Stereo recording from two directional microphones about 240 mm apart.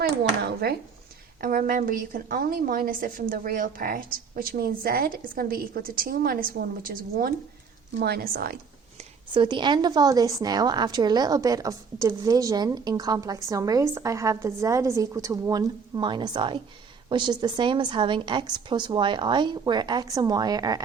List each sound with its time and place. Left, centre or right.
0.0 s a woman's voice: right
9.0 s a woman's voice: centre